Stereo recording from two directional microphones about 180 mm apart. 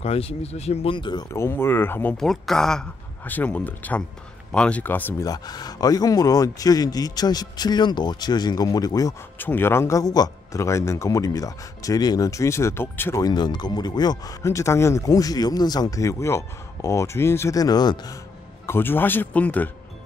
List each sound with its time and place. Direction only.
0.0 s speech: 35° left (ahead or behind); by 19.7 s 10° left (ahead or behind)